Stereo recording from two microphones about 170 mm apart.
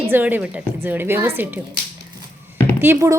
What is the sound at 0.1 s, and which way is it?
A woman's voice, 10° right (ahead or behind).